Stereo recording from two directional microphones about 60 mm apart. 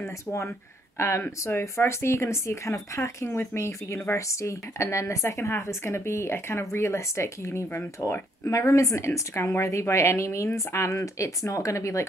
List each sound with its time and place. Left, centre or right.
0.0 s a woman's voice: left
8.5 s a woman's voice: left